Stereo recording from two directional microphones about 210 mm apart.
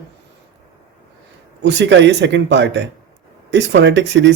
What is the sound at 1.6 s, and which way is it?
Speech, 55° right (ahead or behind).